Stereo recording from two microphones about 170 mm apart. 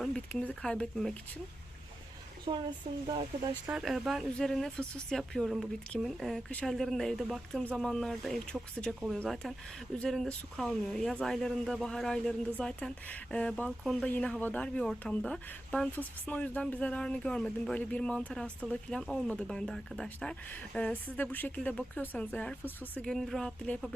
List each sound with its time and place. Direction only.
0.0 s speech: 5° left (ahead or behind)
2.4 s speech: 25° right (ahead or behind)
3.7 s speech: 5° right (ahead or behind)